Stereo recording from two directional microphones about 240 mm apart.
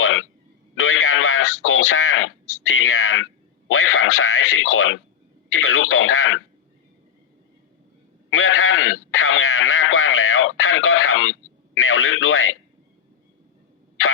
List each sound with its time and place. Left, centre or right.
0.0 s a sound: left
0.8 s speech: left
8.3 s radio: left